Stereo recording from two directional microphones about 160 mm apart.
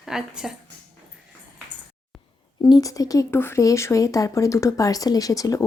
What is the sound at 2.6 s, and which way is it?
Speech, 25° left (ahead or behind).